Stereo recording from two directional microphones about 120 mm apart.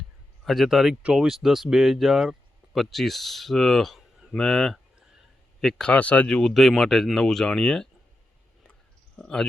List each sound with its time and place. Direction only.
0.4 s speech: centre (ahead or behind)
9.1 s speech: 5° left (ahead or behind)